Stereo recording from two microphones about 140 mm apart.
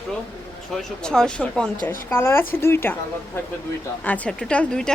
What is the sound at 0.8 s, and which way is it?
Speech, 5° left (ahead or behind).